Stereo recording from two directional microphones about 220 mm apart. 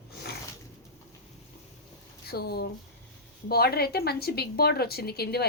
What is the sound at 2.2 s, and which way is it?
Speech, 45° left (ahead or behind).